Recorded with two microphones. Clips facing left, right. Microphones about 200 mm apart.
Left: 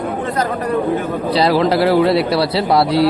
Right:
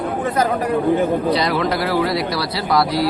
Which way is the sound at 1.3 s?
30° left (ahead or behind).